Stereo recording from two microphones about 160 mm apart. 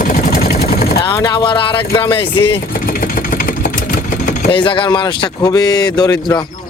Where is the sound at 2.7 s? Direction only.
60° left (ahead or behind).